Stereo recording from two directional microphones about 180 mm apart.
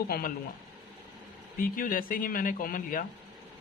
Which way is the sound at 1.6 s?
50° left (ahead or behind).